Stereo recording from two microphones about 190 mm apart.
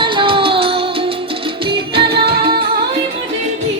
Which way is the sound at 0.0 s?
25° right (ahead or behind).